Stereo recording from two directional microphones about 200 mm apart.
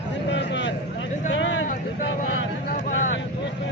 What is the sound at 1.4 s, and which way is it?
Vehicle, 70° left (ahead or behind).